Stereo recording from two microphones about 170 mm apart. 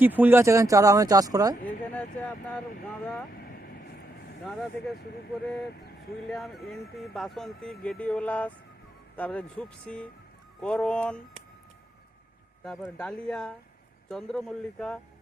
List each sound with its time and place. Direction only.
0.0 s speech: 10° right (ahead or behind)
1.6 s speech: 10° left (ahead or behind)
6.2 s speech: centre (ahead or behind)
13.0 s speech: 5° left (ahead or behind)